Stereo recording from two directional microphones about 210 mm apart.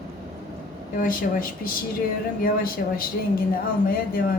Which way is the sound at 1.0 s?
40° left (ahead or behind).